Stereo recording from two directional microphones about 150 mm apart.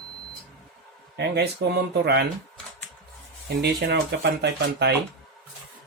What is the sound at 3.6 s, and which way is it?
Speech, 90° right.